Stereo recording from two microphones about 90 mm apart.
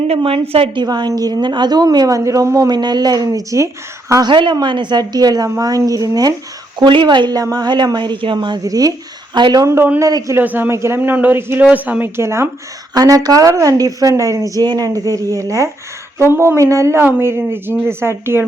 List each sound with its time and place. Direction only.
0.2 s a woman's voice: 80° right
0.9 s a woman's voice: 50° right (ahead or behind)
2.6 s a woman's voice: 50° right (ahead or behind)
4.2 s a woman's voice: 60° right (ahead or behind); by 6.3 s 45° right (ahead or behind)
6.7 s speech: 60° right (ahead or behind)
8.6 s a woman's voice: 45° right (ahead or behind)
9.6 s speech: 30° right (ahead or behind)
10.0 s speech: 40° right (ahead or behind)
10.3 s speech: 20° right (ahead or behind)
12.9 s speech: 45° right (ahead or behind); by 18.4 s 25° right (ahead or behind)